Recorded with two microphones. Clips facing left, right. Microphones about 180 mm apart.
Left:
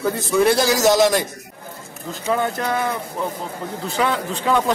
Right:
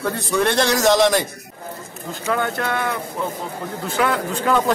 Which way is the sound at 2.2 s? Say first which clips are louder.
Left 1 dB; 20° left (ahead or behind).